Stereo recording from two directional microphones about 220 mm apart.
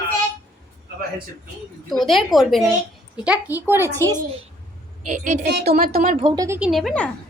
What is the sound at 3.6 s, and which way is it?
Speech, 10° right (ahead or behind).